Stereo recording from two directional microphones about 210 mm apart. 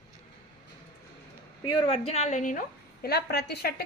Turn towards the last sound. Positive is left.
turn(degrees=50)  # may be behind; listen again after turning